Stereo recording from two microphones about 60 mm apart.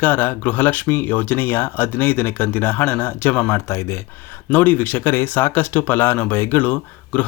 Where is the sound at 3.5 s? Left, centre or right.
Left.